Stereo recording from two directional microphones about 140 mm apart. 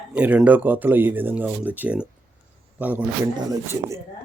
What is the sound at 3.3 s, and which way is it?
Speech, 25° right (ahead or behind).